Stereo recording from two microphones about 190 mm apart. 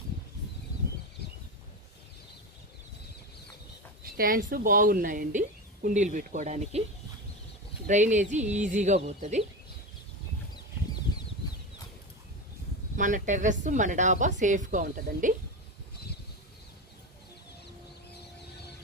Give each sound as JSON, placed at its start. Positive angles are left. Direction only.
{"t": 4.0, "sound": "speech", "side_deg": -50}
{"t": 7.9, "sound": "speech", "side_deg": -40}
{"t": 13.0, "sound": "speech", "side_deg": -40}